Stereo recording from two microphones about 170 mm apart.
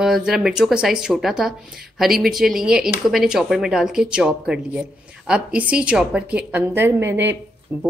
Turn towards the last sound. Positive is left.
turn(degrees=-10)  # may be behind; listen again after turning